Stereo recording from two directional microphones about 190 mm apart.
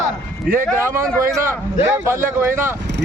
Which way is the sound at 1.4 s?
15° right (ahead or behind).